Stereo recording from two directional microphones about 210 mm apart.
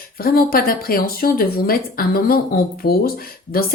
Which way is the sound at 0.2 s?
45° left (ahead or behind).